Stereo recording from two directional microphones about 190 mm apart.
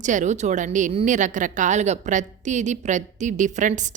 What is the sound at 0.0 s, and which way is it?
A woman's voice, 40° right (ahead or behind).